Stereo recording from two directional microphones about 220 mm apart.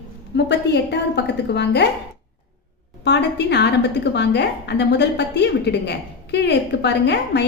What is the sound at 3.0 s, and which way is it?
A woman's voice, 50° left (ahead or behind).